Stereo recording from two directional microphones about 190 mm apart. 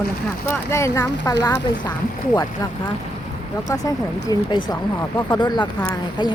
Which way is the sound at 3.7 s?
20° left (ahead or behind).